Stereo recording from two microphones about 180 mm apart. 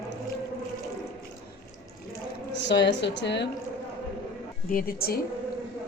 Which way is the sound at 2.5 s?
75° left (ahead or behind).